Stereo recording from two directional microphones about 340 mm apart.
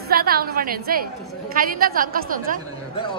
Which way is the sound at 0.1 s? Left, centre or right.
Right.